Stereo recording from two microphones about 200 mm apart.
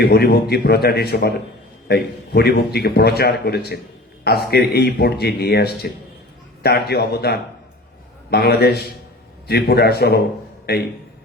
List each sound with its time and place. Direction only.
0.0 s a man's voice: 50° left (ahead or behind)